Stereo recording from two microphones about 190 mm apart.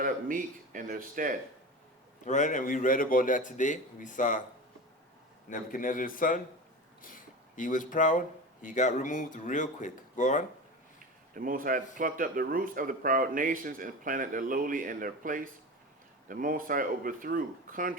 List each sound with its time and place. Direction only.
0.0 s speech: 45° right (ahead or behind)
2.2 s a man's voice: 40° left (ahead or behind)
5.5 s a man's voice: 45° left (ahead or behind)
11.0 s a sound: 45° right (ahead or behind)
11.9 s speech: 45° right (ahead or behind)